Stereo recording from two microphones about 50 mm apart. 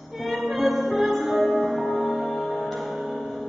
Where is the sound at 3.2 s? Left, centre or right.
Left.